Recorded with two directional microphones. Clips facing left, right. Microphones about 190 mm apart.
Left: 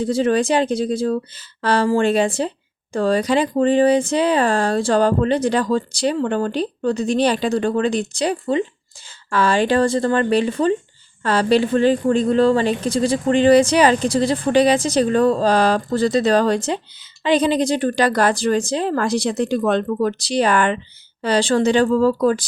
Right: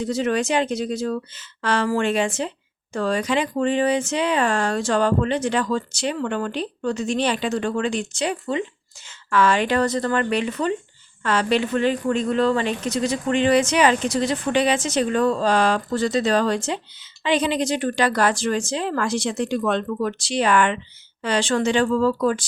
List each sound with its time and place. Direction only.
0.0 s speech: 30° left (ahead or behind)